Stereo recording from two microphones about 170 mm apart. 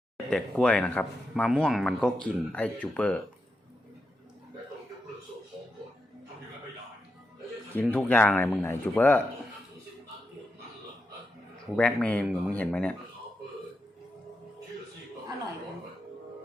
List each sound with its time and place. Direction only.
0.3 s speech: 5° left (ahead or behind)
7.7 s speech: 10° left (ahead or behind)
11.8 s speech: 5° left (ahead or behind)